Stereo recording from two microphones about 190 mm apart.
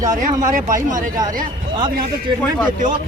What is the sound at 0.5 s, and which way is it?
Speech, 45° right (ahead or behind).